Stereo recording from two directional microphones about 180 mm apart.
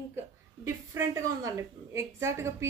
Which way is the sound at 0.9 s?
15° right (ahead or behind).